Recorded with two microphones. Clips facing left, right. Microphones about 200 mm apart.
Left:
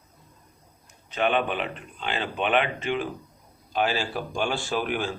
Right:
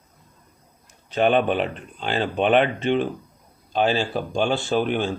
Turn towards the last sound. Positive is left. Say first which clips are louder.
# right 6 dB
turn(degrees=-25)  # may be behind; listen again after turning